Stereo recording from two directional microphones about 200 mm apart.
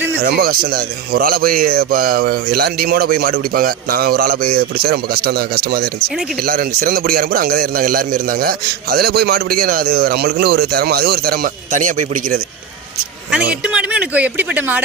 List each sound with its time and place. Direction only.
0.2 s a man's voice: 50° right (ahead or behind)
13.5 s speech: 5° right (ahead or behind)